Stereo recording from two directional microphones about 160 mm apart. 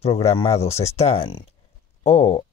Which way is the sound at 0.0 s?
40° left (ahead or behind).